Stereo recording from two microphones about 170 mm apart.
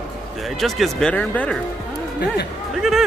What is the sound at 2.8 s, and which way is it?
Speech, centre (ahead or behind).